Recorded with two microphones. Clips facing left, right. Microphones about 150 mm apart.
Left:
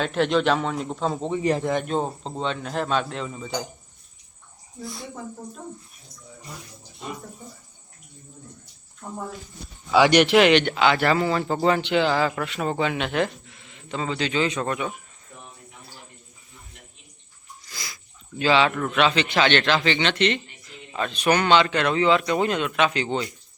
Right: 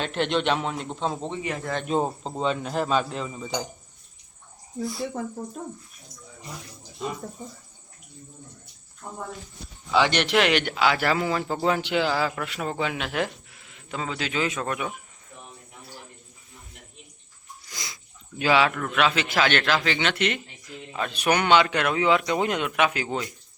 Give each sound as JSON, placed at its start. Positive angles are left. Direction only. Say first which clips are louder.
{"t": 0.0, "sound": "speech", "louder": "left 3 dB", "side_deg": 0}
{"t": 1.4, "sound": "speech", "louder": "left 8 dB", "side_deg": 35}
{"t": 1.9, "sound": "speech", "louder": "right 1 dB", "side_deg": -5}
{"t": 4.8, "sound": "speech", "louder": "right 6 dB", "side_deg": 0}
{"t": 9.9, "sound": "speech", "louder": "left 6 dB", "side_deg": 10}
{"t": 10.2, "sound": "speech", "louder": "left 5 dB", "side_deg": 0}
{"t": 17.7, "sound": "a sound", "louder": "even", "side_deg": -20}
{"t": 18.4, "sound": "a man's voice", "louder": "left 1 dB", "side_deg": -10}
{"t": 18.7, "sound": "a man's voice", "louder": "left 2 dB", "side_deg": 0}